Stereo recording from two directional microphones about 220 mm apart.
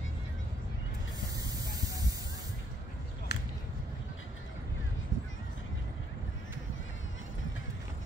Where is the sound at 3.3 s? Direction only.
50° left (ahead or behind).